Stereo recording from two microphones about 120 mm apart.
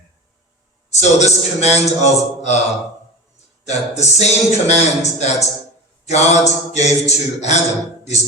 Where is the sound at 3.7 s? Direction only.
70° left (ahead or behind).